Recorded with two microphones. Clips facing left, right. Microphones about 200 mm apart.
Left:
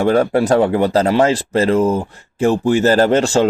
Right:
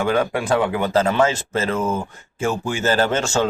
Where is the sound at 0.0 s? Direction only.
35° left (ahead or behind).